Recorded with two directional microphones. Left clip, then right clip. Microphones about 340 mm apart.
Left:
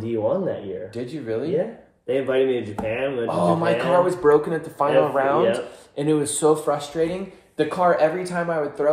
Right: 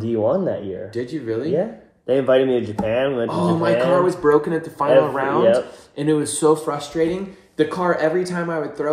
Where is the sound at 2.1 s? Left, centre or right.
Centre.